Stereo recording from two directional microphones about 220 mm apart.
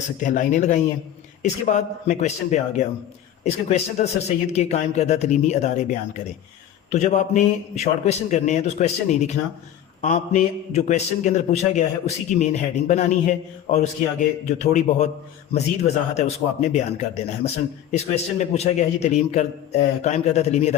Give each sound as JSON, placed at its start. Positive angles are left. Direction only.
{"t": 0.2, "sound": "a man's voice", "side_deg": 35}